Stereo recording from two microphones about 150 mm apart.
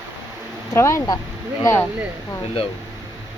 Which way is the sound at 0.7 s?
20° left (ahead or behind).